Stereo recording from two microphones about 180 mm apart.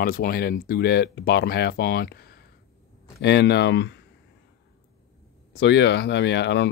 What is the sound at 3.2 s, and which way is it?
Speech, 70° left (ahead or behind).